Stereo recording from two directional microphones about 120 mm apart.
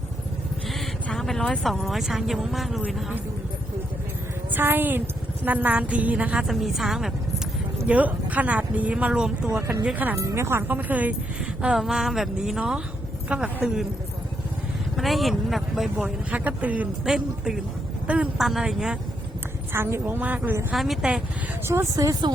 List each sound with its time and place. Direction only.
1.0 s speech: 5° left (ahead or behind)
4.5 s a woman's voice: 15° right (ahead or behind)
9.5 s a woman's voice: 25° right (ahead or behind); by 13.8 s 10° right (ahead or behind)
14.9 s speech: centre (ahead or behind)
16.3 s a woman's voice: 15° right (ahead or behind)
19.7 s a woman's voice: 20° right (ahead or behind)
20.7 s speech: centre (ahead or behind)
21.7 s speech: 25° right (ahead or behind)